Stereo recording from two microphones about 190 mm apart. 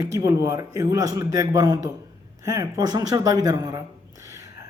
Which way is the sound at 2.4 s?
20° right (ahead or behind).